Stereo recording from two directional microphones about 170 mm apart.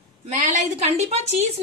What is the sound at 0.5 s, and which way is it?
Speech, 40° right (ahead or behind).